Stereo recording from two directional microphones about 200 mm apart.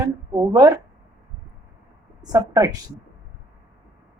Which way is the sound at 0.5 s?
15° right (ahead or behind).